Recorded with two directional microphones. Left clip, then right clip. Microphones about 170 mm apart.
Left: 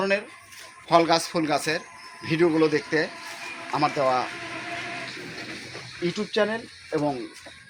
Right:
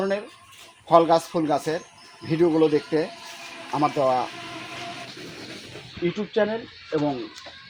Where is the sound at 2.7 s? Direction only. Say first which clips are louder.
Right 1 dB; 50° right (ahead or behind).